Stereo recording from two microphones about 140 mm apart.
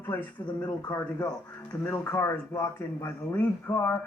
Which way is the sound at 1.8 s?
15° left (ahead or behind).